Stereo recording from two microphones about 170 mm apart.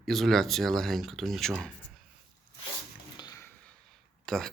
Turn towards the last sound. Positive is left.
turn(degrees=0)  # may be behind; listen again after turning